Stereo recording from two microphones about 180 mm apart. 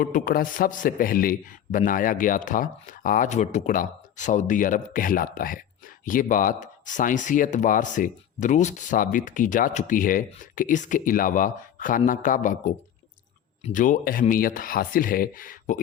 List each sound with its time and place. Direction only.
0.0 s speech: 50° left (ahead or behind)